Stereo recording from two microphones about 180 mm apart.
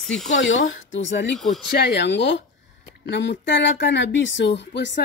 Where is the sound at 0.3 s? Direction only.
90° left.